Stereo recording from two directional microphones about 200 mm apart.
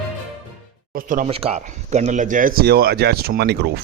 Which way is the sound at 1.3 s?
30° right (ahead or behind).